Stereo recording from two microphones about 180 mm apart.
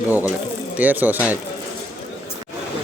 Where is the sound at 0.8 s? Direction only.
10° right (ahead or behind).